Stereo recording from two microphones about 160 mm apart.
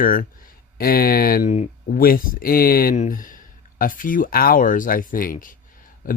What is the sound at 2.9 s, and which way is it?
Speech, 55° left (ahead or behind).